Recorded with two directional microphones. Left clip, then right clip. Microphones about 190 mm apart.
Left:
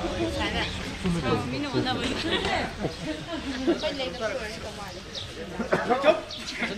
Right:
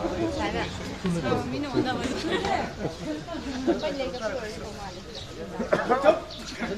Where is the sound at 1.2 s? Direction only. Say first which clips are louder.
Even; 65° right (ahead or behind).